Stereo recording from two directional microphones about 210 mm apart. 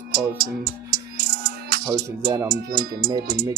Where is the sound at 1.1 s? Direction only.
50° right (ahead or behind).